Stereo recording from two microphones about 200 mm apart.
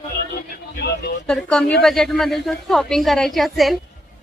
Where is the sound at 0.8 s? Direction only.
55° left (ahead or behind).